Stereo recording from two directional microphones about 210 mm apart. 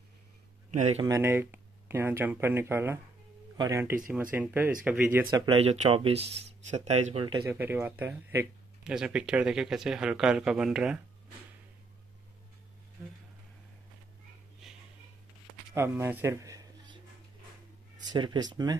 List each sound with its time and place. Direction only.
1.0 s speech: 15° right (ahead or behind)
5.3 s speech: 25° right (ahead or behind)
7.2 s speech: 20° right (ahead or behind)
7.5 s speech: 10° right (ahead or behind)
15.7 s a sound: 10° right (ahead or behind)
18.1 s speech: 20° right (ahead or behind)